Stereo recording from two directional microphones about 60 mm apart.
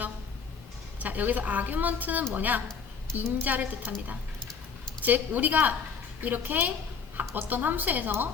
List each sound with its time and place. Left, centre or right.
0.9 s a woman's voice: right